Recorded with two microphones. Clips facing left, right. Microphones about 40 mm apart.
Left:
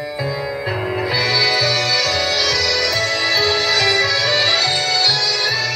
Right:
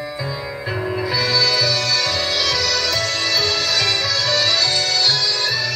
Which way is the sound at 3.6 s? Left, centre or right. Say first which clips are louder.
Left 4 dB; centre.